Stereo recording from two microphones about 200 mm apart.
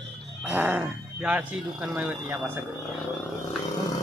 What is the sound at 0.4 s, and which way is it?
Music, 10° right (ahead or behind).